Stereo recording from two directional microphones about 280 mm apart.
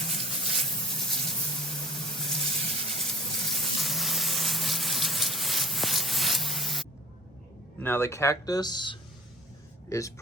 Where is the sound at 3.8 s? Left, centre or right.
Centre.